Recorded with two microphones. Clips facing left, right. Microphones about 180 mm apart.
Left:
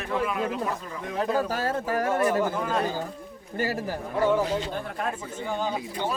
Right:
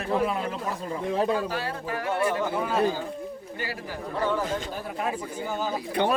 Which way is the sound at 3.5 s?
45° left (ahead or behind).